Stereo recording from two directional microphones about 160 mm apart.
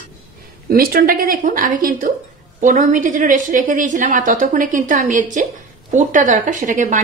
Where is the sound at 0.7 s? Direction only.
65° right (ahead or behind).